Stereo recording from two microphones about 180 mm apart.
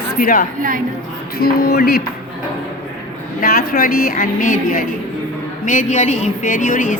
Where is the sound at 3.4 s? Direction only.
55° left (ahead or behind).